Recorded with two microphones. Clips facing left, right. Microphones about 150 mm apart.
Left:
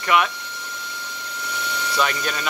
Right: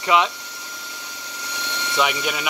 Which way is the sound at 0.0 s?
20° right (ahead or behind).